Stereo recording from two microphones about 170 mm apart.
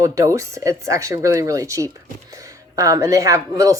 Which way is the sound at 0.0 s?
20° right (ahead or behind).